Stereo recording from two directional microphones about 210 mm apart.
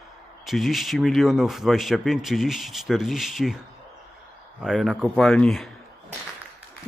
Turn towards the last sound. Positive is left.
turn(degrees=0)  # may be behind; listen again after turning